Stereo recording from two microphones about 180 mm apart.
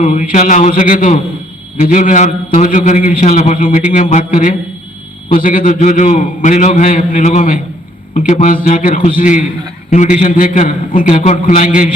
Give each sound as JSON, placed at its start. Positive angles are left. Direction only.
{"t": 0.0, "sound": "a man's voice", "side_deg": 45}